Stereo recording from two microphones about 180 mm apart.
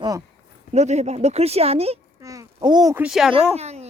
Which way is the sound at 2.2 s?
20° right (ahead or behind).